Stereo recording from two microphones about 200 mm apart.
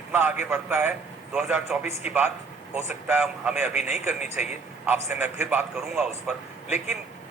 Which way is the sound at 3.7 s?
35° left (ahead or behind).